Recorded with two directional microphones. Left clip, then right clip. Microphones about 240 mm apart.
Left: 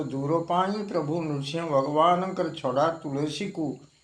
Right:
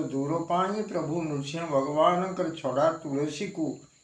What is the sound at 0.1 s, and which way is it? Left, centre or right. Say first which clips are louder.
A man's voice: left 4 dB; left.